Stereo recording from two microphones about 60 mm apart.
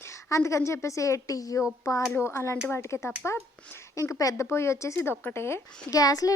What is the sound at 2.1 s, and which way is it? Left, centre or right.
Speech, left.